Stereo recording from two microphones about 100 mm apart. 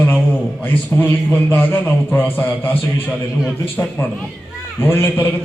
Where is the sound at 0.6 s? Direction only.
20° left (ahead or behind).